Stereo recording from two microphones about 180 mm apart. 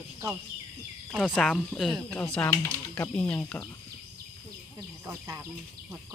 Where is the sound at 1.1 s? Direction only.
Centre (ahead or behind).